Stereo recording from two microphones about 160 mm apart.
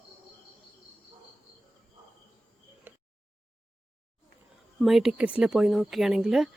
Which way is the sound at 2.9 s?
10° right (ahead or behind).